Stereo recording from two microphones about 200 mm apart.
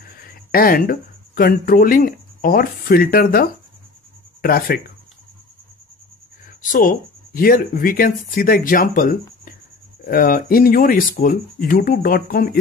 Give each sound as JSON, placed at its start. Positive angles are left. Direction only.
{"t": 0.3, "sound": "speech", "side_deg": 45}
{"t": 6.6, "sound": "speech", "side_deg": 40}